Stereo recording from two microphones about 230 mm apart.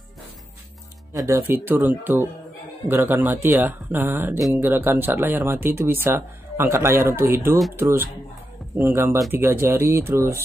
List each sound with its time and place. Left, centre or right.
1.1 s speech: centre